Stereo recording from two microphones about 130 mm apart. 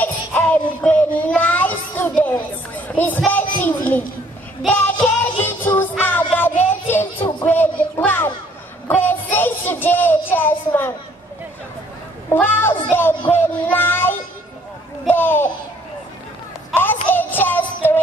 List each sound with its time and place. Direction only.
0.0 s child singing: 15° left (ahead or behind)
2.9 s a sound: 15° left (ahead or behind)
3.3 s speech: 15° left (ahead or behind)
4.6 s music: 15° left (ahead or behind)
7.4 s child singing: 15° left (ahead or behind)
12.3 s child singing: 15° left (ahead or behind)
15.0 s a sound: 15° left (ahead or behind)
16.7 s music: 15° left (ahead or behind)